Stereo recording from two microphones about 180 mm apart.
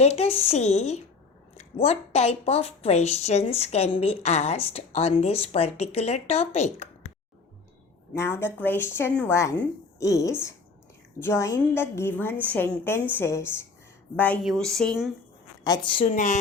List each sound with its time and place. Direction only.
0.0 s speech: 35° left (ahead or behind)
8.1 s a woman's voice: 15° left (ahead or behind)
14.4 s speech: centre (ahead or behind)
15.6 s a woman's voice: 25° left (ahead or behind)
16.1 s speech: 45° left (ahead or behind)